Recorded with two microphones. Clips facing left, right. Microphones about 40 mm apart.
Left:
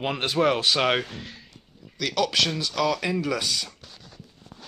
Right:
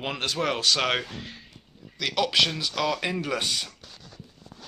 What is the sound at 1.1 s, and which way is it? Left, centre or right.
Speech, centre.